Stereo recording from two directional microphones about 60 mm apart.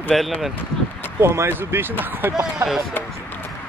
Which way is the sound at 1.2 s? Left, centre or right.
Right.